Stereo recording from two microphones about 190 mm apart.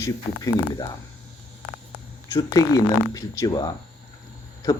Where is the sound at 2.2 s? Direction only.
15° left (ahead or behind).